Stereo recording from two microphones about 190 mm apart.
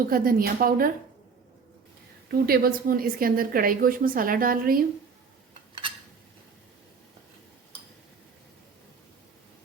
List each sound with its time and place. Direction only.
0.1 s a woman's voice: 50° right (ahead or behind)
2.3 s a woman's voice: 50° right (ahead or behind)